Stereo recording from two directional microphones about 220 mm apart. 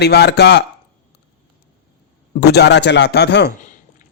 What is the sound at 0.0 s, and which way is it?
Speech, 50° left (ahead or behind).